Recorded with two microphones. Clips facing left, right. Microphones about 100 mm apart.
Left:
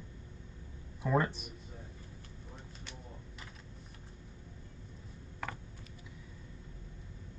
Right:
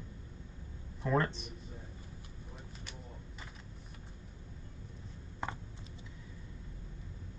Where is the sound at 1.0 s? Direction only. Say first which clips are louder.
Left 1 dB; 10° left (ahead or behind).